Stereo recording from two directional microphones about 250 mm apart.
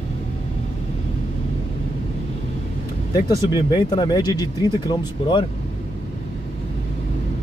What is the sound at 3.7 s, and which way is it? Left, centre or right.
Speech, centre.